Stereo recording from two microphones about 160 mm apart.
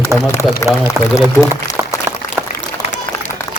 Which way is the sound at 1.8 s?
15° right (ahead or behind).